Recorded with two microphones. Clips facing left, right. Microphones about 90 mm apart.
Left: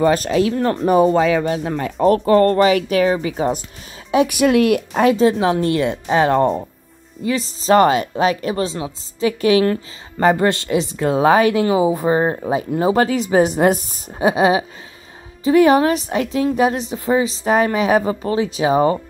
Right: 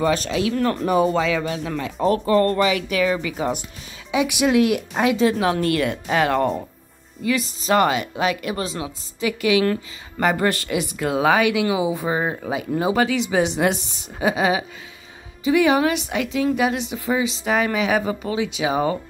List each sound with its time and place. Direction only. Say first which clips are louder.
0.0 s a woman's voice: left 5 dB; 40° left (ahead or behind)
4.1 s a woman's voice: left 4 dB; 50° left (ahead or behind)
5.2 s a woman's voice: left 4 dB; 25° left (ahead or behind); by 12.4 s 45° left (ahead or behind)
12.4 s a woman's voice: left 4 dB; 35° left (ahead or behind)